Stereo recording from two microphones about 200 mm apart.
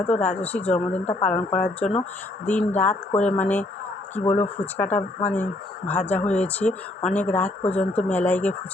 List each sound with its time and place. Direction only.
0.1 s speech: 10° left (ahead or behind)
1.8 s speech: 30° left (ahead or behind)
2.5 s speech: 10° left (ahead or behind)